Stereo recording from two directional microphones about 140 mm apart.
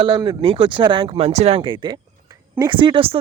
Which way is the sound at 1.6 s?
35° right (ahead or behind).